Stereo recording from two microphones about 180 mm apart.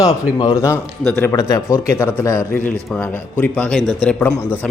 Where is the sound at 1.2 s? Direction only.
15° left (ahead or behind).